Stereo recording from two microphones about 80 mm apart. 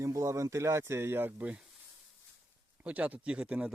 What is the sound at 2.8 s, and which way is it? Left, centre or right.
Speech, centre.